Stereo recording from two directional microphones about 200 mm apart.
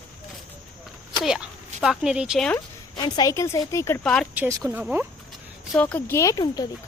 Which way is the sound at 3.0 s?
20° left (ahead or behind).